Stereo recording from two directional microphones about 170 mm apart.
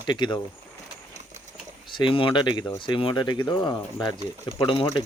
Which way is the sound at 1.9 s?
30° left (ahead or behind).